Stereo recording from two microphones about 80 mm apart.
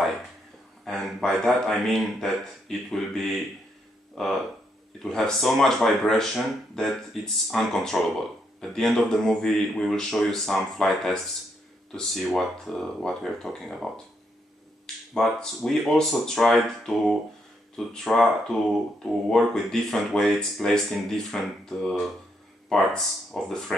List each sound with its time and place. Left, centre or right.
0.8 s a man's voice: centre
15.1 s speech: centre